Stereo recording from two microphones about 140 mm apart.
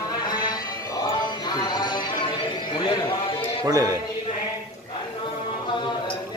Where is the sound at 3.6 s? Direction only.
25° right (ahead or behind).